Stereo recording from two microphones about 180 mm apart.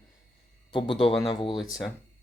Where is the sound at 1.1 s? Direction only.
Centre (ahead or behind).